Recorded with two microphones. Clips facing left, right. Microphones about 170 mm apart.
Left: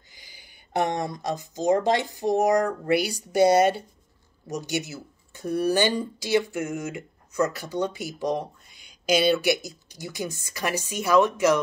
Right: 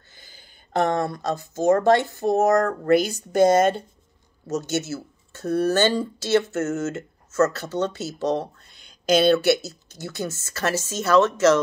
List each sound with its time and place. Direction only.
0.1 s a sound: 15° left (ahead or behind)
1.1 s speech: 15° left (ahead or behind)
3.3 s speech: 50° right (ahead or behind)
4.5 s speech: 15° left (ahead or behind)